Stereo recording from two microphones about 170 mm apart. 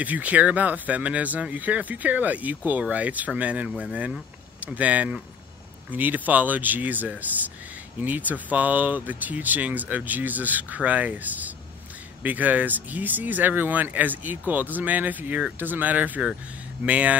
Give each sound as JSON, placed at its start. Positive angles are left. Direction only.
{"t": 0.0, "sound": "speech", "side_deg": -10}